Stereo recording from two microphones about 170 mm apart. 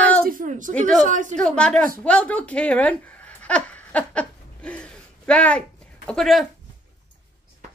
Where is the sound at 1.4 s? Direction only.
5° left (ahead or behind).